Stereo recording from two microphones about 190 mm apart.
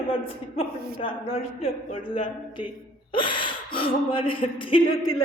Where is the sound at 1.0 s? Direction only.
30° left (ahead or behind).